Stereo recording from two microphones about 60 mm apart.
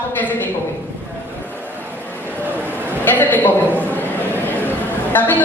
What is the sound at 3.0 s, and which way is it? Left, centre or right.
Speech, left.